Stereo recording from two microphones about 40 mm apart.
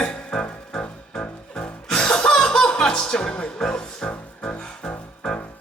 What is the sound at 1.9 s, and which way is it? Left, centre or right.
Music, left.